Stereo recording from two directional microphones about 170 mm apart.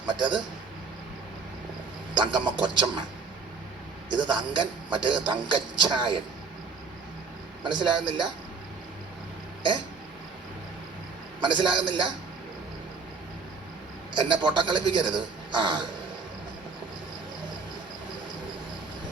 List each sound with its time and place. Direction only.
0.0 s a man's voice: 25° right (ahead or behind)
2.1 s a man's voice: 25° right (ahead or behind)
4.1 s a man's voice: 25° right (ahead or behind)
7.6 s a man's voice: 25° right (ahead or behind)
11.3 s a man's voice: 25° right (ahead or behind)
14.1 s a man's voice: 25° right (ahead or behind)